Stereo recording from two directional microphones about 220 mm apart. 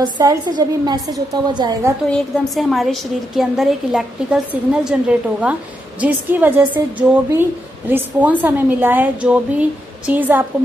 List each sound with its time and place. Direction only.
0.0 s a woman's voice: 20° right (ahead or behind)
2.0 s a woman's voice: centre (ahead or behind)